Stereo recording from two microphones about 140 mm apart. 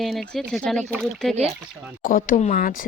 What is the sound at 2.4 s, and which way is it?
Speech, 75° left (ahead or behind).